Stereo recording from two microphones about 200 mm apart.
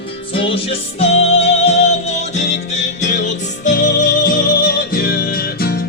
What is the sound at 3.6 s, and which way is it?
Music, 40° left (ahead or behind).